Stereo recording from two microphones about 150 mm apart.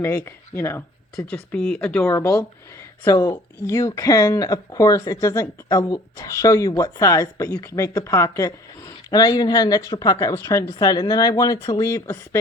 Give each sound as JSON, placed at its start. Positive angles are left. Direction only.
{"t": 0.3, "sound": "speech", "side_deg": 15}
{"t": 1.1, "sound": "speech", "side_deg": 5}
{"t": 2.0, "sound": "speech", "side_deg": 20}